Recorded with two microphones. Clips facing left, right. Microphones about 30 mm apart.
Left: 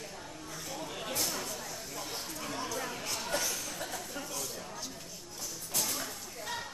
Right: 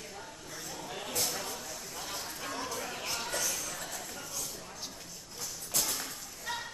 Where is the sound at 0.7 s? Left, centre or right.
Centre.